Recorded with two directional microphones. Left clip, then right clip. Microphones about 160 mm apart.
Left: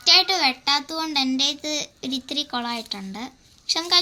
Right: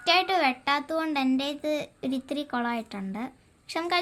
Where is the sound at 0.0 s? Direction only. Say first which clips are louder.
Left 5 dB; 55° right (ahead or behind).